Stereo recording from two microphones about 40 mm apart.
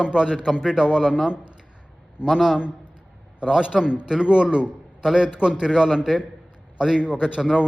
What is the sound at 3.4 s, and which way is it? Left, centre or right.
A man's voice, centre.